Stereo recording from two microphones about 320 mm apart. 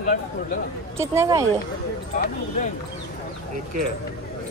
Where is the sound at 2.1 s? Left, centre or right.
Left.